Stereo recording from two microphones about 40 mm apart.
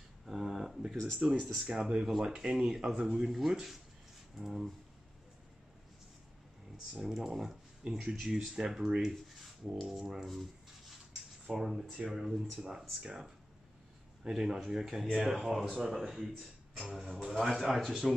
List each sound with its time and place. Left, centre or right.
0.3 s a sound: centre
0.9 s speech: centre
1.2 s speech: right
2.0 s speech: centre
7.0 s speech: centre
11.4 s speech: centre
14.2 s speech: centre